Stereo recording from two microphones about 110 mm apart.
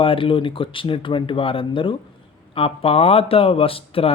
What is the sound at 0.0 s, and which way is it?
Speech, 55° left (ahead or behind).